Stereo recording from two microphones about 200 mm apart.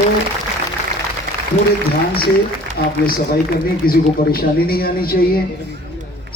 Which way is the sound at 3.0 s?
45° left (ahead or behind).